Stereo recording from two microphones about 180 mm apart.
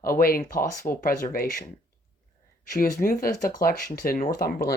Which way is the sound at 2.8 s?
55° left (ahead or behind).